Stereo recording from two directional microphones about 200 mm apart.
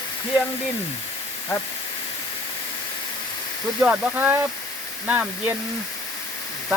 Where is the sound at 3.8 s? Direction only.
10° right (ahead or behind).